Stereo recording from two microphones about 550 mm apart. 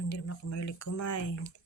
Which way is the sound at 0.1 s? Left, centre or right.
Left.